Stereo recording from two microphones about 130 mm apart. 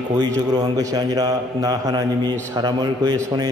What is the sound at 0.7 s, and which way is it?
A man's voice, 30° right (ahead or behind).